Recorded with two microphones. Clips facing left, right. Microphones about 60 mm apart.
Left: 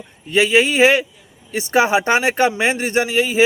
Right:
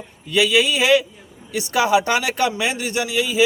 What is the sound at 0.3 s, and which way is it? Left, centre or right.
A man's voice, left.